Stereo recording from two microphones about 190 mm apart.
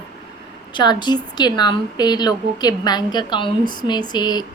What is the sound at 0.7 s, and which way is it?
Speech, 20° left (ahead or behind).